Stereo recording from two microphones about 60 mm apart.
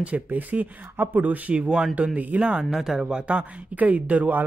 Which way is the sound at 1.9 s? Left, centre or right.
Right.